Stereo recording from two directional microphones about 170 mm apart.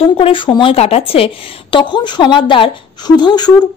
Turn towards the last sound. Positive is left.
turn(degrees=25)  # may be behind; listen again after turning